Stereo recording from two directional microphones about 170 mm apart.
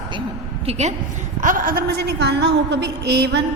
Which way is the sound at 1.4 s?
50° right (ahead or behind).